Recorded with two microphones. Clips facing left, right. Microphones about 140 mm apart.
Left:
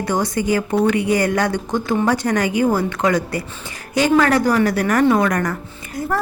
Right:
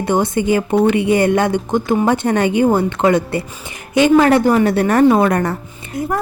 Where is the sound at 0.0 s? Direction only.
25° right (ahead or behind).